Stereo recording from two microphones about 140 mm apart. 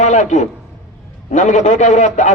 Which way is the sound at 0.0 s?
60° left (ahead or behind).